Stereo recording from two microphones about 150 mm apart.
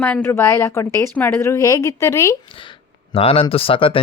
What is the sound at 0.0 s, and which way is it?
Speech, 15° left (ahead or behind).